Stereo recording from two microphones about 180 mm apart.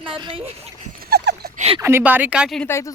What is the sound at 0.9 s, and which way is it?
Dog, 65° right (ahead or behind).